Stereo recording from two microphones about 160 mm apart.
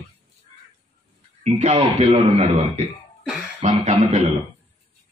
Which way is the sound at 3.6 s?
45° right (ahead or behind).